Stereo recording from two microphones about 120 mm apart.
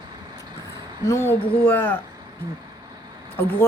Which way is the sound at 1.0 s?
20° left (ahead or behind).